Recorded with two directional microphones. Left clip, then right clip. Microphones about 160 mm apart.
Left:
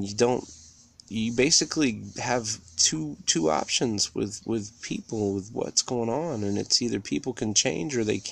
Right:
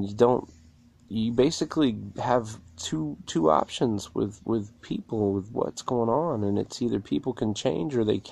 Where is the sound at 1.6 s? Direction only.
40° left (ahead or behind).